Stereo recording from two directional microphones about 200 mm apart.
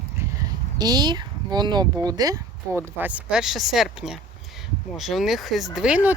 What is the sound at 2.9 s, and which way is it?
Speech, 5° right (ahead or behind).